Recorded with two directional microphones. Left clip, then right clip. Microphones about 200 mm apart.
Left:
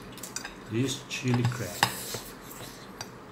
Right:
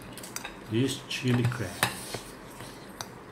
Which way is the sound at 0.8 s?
25° right (ahead or behind).